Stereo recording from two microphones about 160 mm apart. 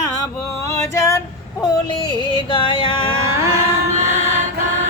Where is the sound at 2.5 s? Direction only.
30° left (ahead or behind).